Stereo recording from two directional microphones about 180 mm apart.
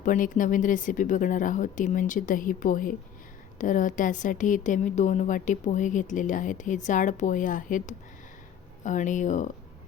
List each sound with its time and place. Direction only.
0.0 s a woman's voice: 45° left (ahead or behind)